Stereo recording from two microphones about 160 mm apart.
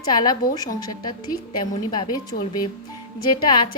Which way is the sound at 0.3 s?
25° left (ahead or behind).